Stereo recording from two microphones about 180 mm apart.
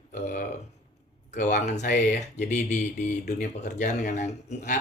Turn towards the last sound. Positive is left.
turn(degrees=40)  # may be behind; listen again after turning